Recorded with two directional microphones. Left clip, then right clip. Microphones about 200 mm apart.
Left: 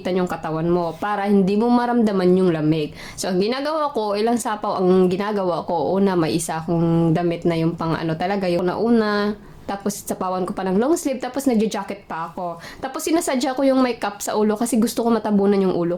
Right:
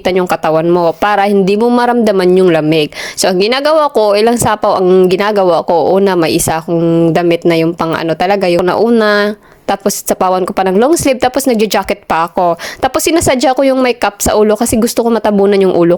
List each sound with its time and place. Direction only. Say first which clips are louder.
0.0 s speech: right 12 dB; 45° right (ahead or behind)